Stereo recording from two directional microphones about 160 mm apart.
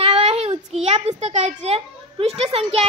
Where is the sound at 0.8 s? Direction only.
45° right (ahead or behind).